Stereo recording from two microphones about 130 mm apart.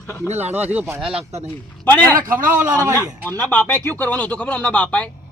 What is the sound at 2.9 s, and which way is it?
Speech, 25° right (ahead or behind).